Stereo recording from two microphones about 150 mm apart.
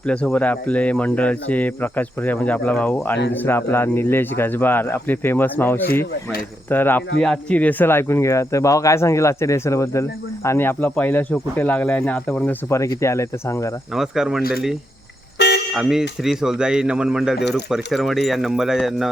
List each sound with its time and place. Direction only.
0.1 s speech: 5° left (ahead or behind)
12.7 s speech: 20° left (ahead or behind)
13.9 s speech: 5° right (ahead or behind)